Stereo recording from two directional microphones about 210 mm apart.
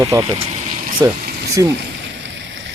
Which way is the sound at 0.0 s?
15° right (ahead or behind).